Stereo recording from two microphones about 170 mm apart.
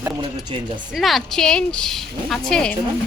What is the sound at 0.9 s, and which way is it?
A woman's voice, centre (ahead or behind).